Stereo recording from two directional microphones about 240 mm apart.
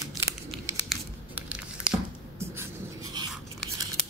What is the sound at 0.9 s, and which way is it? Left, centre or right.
Crumpling, centre.